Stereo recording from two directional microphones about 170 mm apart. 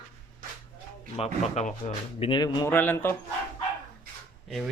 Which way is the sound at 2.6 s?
10° left (ahead or behind).